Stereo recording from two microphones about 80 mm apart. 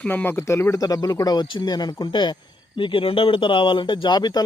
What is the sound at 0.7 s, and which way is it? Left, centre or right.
Speech, left.